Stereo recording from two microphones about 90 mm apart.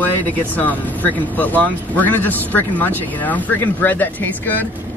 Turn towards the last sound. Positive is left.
turn(degrees=20)  # may be behind; listen again after turning